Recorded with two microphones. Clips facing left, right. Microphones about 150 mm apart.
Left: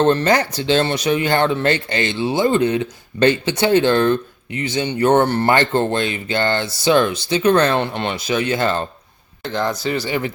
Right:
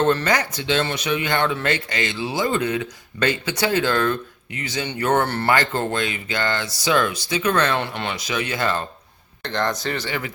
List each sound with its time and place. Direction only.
0.0 s speech: 25° left (ahead or behind)
9.4 s speech: 5° left (ahead or behind)
10.1 s speech: 25° left (ahead or behind)